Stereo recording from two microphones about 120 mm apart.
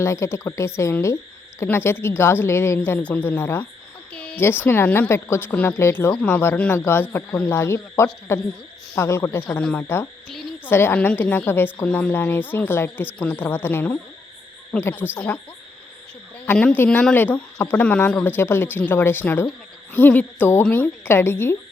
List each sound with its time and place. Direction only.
0.0 s a woman's voice: 25° left (ahead or behind)
1.0 s a sound: 25° left (ahead or behind)
1.6 s a woman's voice: 20° left (ahead or behind)
4.1 s a woman's voice: 10° left (ahead or behind)
9.5 s speech: 5° left (ahead or behind)
9.8 s a woman's voice: 20° left (ahead or behind)
16.5 s speech: 10° left (ahead or behind)